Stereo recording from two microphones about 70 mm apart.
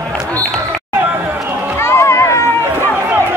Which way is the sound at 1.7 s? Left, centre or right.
Left.